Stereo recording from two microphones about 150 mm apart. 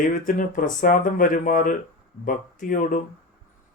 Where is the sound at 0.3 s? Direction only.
65° left (ahead or behind).